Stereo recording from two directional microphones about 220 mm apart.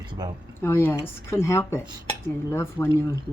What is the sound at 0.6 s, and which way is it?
Speech, 10° left (ahead or behind).